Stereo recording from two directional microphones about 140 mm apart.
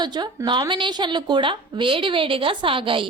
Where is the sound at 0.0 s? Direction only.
30° right (ahead or behind).